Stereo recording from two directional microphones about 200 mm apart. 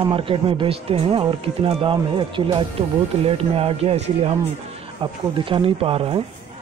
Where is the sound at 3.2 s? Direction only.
30° right (ahead or behind).